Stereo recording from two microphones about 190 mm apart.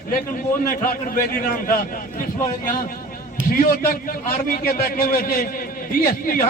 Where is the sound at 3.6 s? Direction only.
50° left (ahead or behind).